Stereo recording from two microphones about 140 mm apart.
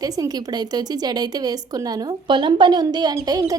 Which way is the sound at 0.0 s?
25° right (ahead or behind).